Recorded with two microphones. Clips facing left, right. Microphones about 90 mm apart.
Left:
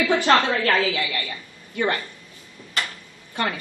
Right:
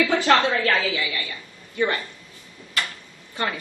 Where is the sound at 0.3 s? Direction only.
50° left (ahead or behind).